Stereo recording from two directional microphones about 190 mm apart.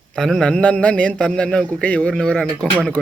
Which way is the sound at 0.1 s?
Centre (ahead or behind).